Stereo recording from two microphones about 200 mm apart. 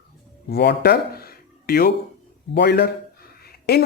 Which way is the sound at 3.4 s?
50° left (ahead or behind).